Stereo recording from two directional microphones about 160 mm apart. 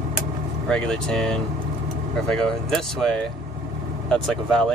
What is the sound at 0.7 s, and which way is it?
Speech, 5° left (ahead or behind).